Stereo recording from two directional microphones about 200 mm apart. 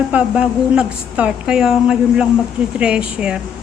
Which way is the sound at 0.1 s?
5° right (ahead or behind).